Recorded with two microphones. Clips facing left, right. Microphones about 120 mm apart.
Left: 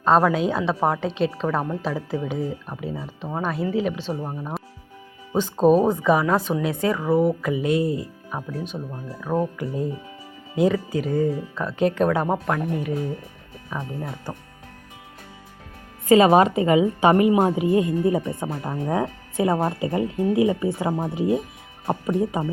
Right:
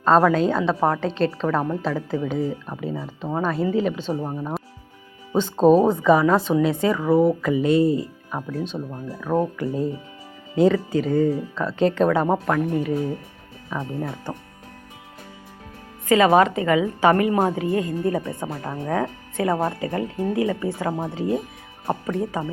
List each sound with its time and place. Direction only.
0.0 s a woman's voice: 5° left (ahead or behind)
16.0 s a woman's voice: 25° left (ahead or behind)